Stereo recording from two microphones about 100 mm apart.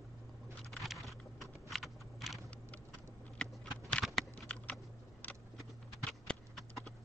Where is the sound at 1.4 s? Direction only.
Centre (ahead or behind).